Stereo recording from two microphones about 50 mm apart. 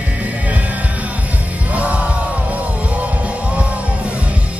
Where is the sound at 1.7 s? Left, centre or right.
Right.